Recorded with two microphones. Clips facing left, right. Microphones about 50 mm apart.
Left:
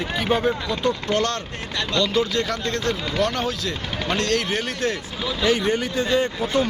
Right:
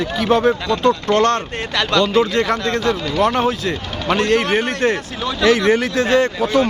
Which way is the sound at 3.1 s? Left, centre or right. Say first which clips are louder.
Right 8 dB; right.